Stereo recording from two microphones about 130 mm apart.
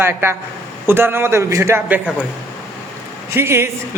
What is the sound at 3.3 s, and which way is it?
Speech, 20° right (ahead or behind).